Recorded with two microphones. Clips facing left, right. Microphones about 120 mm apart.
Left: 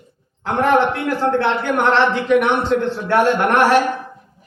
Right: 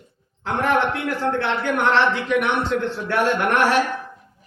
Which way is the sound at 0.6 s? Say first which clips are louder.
Left 5 dB; 35° left (ahead or behind).